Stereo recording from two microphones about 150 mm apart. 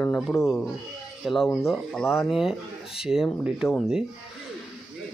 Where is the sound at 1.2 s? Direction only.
Centre (ahead or behind).